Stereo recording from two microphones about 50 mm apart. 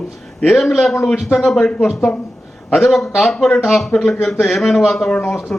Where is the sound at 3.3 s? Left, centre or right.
Centre.